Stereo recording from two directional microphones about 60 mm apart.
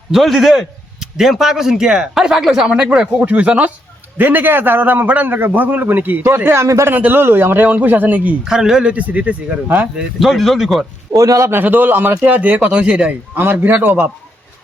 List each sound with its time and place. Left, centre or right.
0.1 s a man's voice: centre
2.6 s a man's voice: centre; by 6.1 s right
6.2 s a man's voice: right
6.7 s a man's voice: right
6.9 s a man's voice: right
8.4 s speech: centre
8.9 s speech: right
10.2 s a man's voice: centre
11.1 s a man's voice: right
11.5 s a man's voice: right
13.3 s a man's voice: right